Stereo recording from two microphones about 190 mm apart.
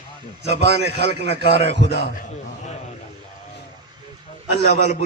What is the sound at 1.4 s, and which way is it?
Speech, 30° left (ahead or behind).